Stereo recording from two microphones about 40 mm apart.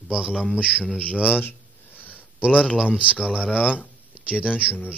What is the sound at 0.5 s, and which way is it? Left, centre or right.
Speech, right.